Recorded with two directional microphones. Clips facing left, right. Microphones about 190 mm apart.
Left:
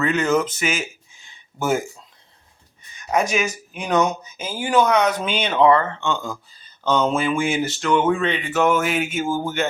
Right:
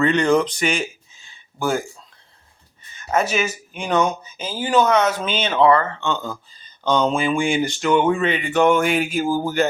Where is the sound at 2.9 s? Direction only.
15° left (ahead or behind).